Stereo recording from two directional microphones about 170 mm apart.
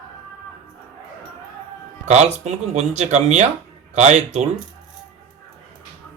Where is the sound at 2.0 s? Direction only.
40° right (ahead or behind).